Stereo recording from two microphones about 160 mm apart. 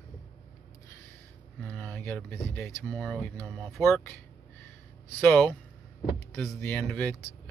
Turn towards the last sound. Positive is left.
turn(degrees=5)  # may be behind; listen again after turning